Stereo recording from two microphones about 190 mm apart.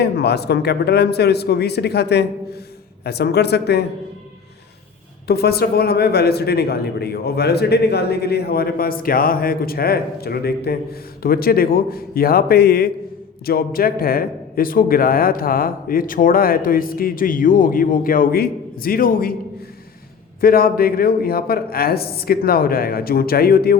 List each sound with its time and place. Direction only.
0.0 s a man's voice: 60° left (ahead or behind)
5.3 s a man's voice: 55° left (ahead or behind)
20.4 s speech: 50° left (ahead or behind)